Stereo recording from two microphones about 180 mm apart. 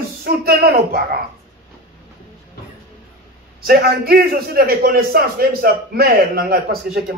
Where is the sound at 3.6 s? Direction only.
55° right (ahead or behind).